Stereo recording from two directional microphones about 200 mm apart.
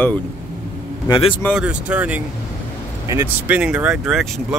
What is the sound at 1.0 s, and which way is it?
Speech, 25° left (ahead or behind).